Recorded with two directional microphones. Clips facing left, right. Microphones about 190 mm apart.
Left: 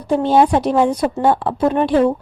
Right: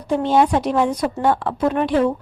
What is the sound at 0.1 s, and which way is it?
A woman's voice, 35° left (ahead or behind).